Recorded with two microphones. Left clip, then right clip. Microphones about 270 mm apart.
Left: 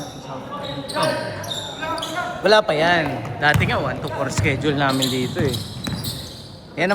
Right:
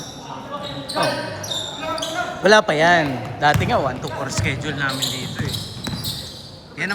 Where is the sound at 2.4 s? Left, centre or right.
Right; by 5.5 s centre.